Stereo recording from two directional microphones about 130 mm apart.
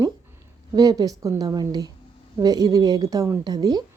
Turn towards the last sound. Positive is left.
turn(degrees=-30)  # may be behind; listen again after turning